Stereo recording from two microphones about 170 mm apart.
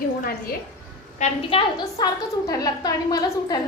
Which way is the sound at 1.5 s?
25° left (ahead or behind).